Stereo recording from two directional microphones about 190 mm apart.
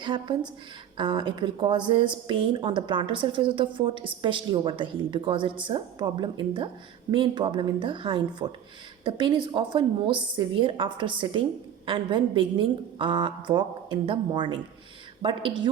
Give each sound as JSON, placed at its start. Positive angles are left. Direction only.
{"t": 0.0, "sound": "a woman's voice", "side_deg": -25}